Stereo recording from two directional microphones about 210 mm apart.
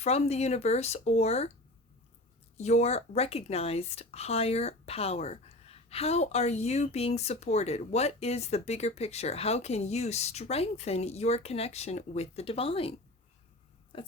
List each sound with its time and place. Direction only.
0.0 s speech: 30° left (ahead or behind)
2.6 s speech: 30° left (ahead or behind)